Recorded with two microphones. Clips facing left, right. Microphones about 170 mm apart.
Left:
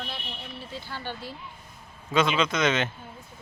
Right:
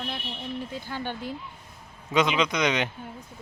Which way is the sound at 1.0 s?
15° right (ahead or behind).